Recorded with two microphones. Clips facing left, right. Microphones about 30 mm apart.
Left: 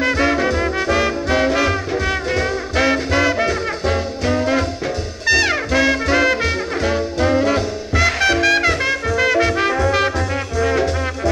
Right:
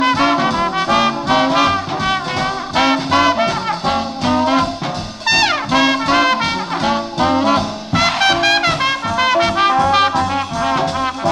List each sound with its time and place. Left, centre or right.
0.0 s music: right